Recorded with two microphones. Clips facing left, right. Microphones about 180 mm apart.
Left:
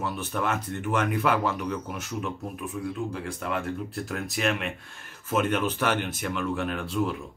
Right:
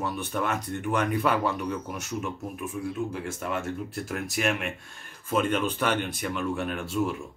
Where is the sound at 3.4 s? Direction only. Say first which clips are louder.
Left 1 dB; centre (ahead or behind).